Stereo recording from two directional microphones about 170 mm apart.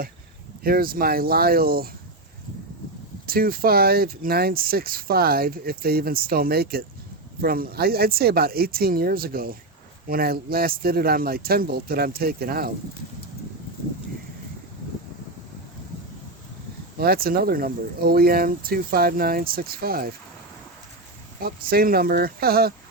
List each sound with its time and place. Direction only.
0.6 s speech: 60° right (ahead or behind)
3.2 s speech: 60° right (ahead or behind)
17.0 s speech: 60° right (ahead or behind)
21.4 s speech: 60° right (ahead or behind)